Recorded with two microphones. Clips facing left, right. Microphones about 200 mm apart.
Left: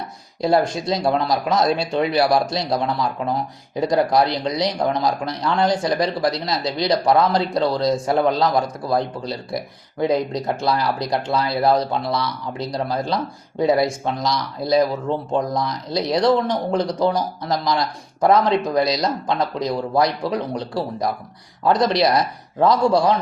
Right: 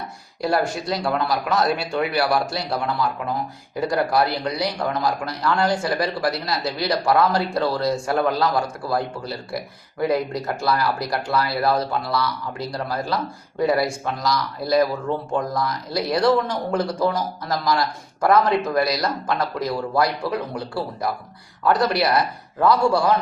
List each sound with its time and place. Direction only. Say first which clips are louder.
0.4 s speech: left 4 dB; 20° left (ahead or behind)
3.8 s a man's voice: left 3 dB; 20° left (ahead or behind)
21.6 s speech: left 2 dB; 20° left (ahead or behind)